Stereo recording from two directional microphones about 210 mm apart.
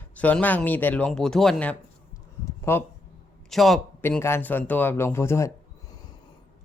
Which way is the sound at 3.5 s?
Centre (ahead or behind).